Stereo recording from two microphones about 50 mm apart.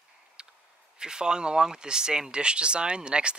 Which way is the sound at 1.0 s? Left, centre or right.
Centre.